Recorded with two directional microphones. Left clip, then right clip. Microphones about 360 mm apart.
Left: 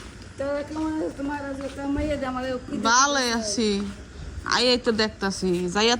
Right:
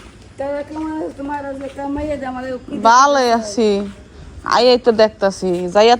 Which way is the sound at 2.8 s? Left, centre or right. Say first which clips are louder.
Right 10 dB; centre.